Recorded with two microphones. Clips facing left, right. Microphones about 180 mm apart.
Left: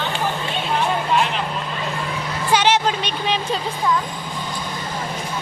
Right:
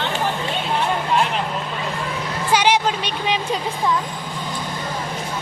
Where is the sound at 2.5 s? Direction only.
10° right (ahead or behind).